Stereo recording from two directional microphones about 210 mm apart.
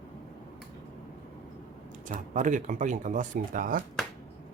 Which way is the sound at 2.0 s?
35° right (ahead or behind).